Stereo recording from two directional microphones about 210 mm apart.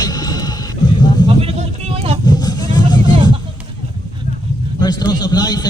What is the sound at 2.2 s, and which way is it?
Vehicle, 20° left (ahead or behind).